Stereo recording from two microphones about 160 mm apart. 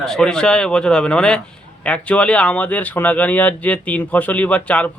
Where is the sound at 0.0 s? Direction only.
5° left (ahead or behind).